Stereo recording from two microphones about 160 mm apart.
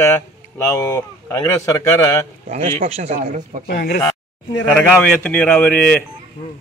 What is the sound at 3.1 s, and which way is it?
Speech, 50° right (ahead or behind).